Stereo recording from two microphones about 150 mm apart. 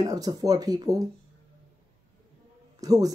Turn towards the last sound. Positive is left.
turn(degrees=-25)  # may be behind; listen again after turning